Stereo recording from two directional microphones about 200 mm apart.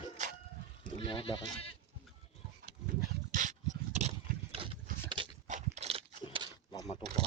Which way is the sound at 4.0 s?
30° right (ahead or behind).